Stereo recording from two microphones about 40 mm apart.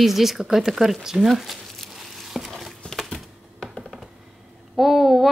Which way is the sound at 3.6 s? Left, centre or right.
Centre.